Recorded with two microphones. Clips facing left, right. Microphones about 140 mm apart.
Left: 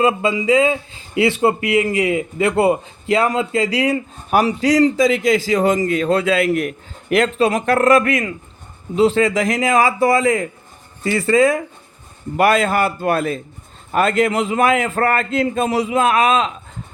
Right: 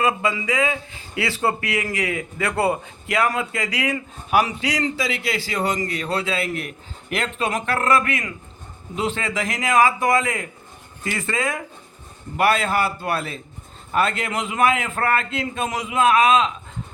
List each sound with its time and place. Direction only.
0.0 s a man's voice: 25° left (ahead or behind); by 16.5 s 40° left (ahead or behind)